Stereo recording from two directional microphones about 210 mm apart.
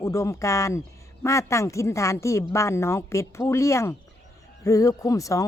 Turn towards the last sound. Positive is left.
turn(degrees=15)  # may be behind; listen again after turning